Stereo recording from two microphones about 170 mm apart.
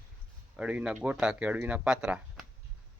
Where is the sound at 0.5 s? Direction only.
5° right (ahead or behind).